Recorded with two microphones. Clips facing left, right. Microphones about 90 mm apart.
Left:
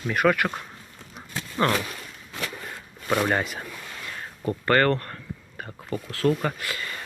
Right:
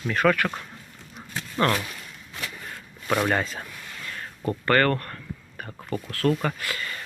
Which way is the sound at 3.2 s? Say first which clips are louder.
Even; 15° left (ahead or behind).